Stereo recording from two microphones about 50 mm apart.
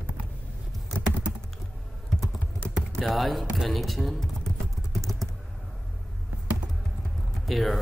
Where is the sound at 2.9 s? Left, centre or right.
Centre.